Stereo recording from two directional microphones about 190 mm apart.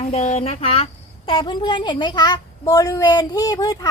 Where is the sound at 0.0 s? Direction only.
35° left (ahead or behind).